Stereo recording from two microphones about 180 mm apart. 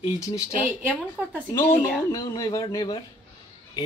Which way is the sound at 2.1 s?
25° left (ahead or behind).